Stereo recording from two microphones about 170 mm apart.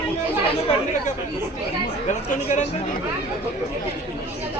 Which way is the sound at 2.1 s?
45° left (ahead or behind).